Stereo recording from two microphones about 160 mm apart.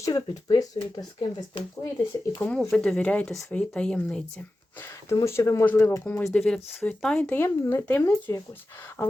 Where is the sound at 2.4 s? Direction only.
5° left (ahead or behind).